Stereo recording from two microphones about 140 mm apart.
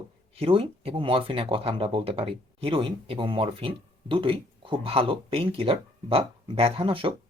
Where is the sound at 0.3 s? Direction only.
40° right (ahead or behind).